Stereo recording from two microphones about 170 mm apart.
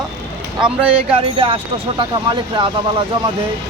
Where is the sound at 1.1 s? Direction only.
30° right (ahead or behind).